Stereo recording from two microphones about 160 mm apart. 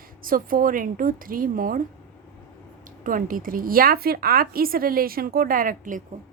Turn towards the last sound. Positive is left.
turn(degrees=-60)  # may be behind; listen again after turning